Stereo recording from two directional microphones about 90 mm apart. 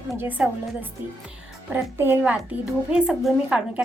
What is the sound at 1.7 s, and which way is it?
Speech, 25° right (ahead or behind).